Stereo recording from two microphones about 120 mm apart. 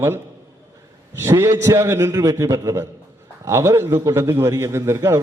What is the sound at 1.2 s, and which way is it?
A man's voice, 25° right (ahead or behind).